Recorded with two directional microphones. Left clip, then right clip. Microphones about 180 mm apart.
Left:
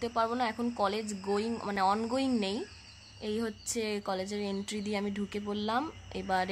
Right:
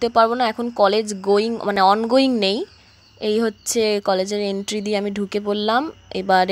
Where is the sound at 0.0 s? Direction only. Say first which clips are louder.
Right 14 dB; 35° right (ahead or behind).